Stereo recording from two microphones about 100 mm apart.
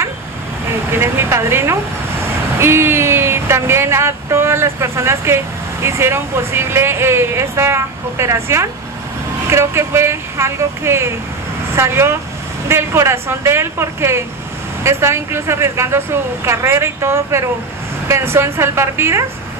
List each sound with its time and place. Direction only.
0.9 s speech: 25° right (ahead or behind)